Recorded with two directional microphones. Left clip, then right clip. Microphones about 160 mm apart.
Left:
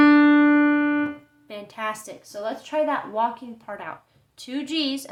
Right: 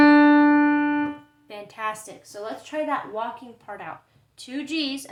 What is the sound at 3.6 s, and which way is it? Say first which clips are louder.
A woman's voice: left 2 dB; 25° left (ahead or behind).